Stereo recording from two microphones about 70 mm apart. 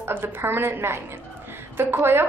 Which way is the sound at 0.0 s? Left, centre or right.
Right.